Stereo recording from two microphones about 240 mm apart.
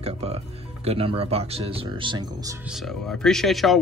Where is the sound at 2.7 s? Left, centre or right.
Centre.